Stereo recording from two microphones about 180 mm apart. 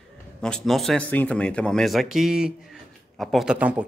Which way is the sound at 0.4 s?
Centre (ahead or behind).